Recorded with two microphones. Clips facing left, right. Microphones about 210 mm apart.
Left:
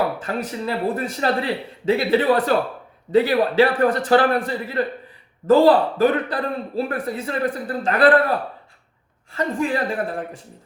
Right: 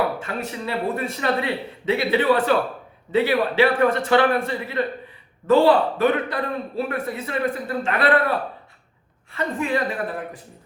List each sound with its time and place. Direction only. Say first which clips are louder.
0.6 s speech: left 1 dB; 35° left (ahead or behind)
9.6 s speech: left 1 dB; 30° left (ahead or behind)